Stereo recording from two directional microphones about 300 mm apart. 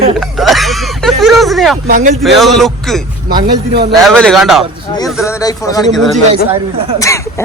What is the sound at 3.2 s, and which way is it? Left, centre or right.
Speech, right.